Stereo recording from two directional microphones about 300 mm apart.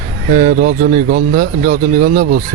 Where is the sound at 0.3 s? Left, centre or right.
Right.